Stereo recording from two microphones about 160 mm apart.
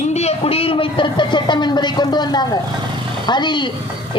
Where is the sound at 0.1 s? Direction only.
40° left (ahead or behind).